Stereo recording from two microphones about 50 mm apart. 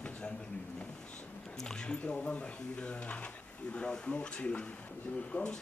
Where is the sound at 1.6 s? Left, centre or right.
Centre.